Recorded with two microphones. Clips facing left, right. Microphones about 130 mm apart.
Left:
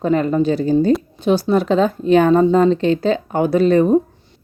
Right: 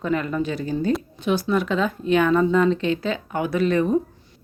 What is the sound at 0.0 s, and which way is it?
A woman's voice, 35° left (ahead or behind).